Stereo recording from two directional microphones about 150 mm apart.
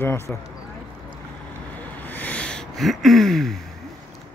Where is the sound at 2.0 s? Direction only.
10° left (ahead or behind).